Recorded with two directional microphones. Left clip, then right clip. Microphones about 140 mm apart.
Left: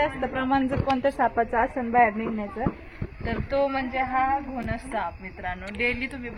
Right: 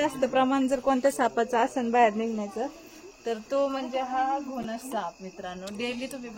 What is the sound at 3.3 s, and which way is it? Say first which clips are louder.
A woman's voice: left 2 dB; 45° right (ahead or behind).